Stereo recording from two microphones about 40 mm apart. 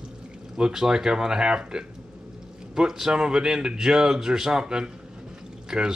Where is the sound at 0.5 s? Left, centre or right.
Centre.